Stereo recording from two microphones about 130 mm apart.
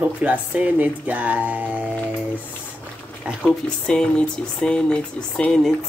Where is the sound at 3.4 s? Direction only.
5° left (ahead or behind).